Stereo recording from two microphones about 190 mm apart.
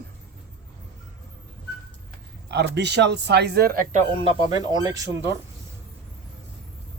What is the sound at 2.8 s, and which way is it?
Speech, 65° right (ahead or behind).